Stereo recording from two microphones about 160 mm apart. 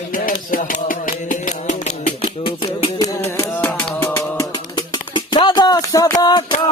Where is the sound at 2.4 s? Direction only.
35° left (ahead or behind).